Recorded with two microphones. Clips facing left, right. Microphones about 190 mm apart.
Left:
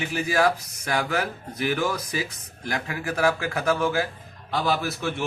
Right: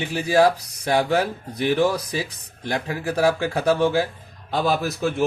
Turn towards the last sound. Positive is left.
turn(degrees=-35)  # may be behind; listen again after turning